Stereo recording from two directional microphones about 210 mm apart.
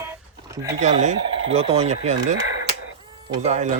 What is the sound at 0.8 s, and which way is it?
Speech, 35° right (ahead or behind).